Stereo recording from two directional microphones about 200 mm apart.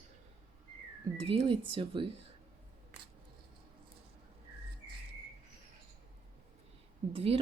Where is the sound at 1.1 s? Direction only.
25° right (ahead or behind).